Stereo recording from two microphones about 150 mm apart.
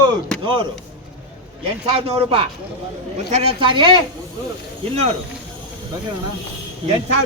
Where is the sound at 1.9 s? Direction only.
40° right (ahead or behind).